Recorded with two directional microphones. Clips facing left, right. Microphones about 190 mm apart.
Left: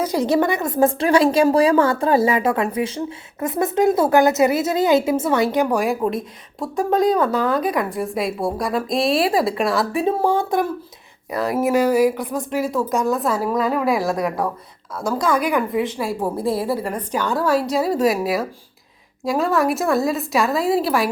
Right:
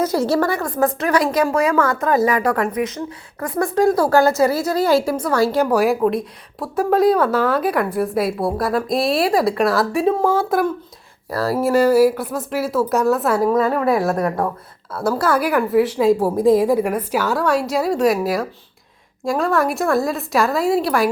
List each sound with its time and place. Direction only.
0.0 s a woman's voice: 15° left (ahead or behind)
5.7 s speech: centre (ahead or behind)
11.3 s speech: 20° left (ahead or behind)
12.0 s speech: 5° right (ahead or behind)
16.0 s speech: 15° right (ahead or behind); by 21.1 s centre (ahead or behind)